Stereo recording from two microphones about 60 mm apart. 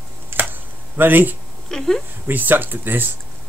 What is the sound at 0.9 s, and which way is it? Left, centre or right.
Speech, right.